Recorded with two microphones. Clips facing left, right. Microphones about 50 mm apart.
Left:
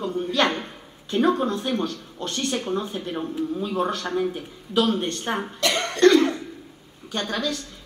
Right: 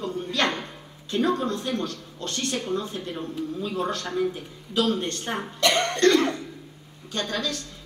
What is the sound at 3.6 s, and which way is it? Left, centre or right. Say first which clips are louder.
A woman's voice: left 1 dB; centre.